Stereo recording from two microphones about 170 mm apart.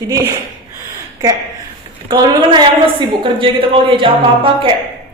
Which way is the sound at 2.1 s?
25° right (ahead or behind).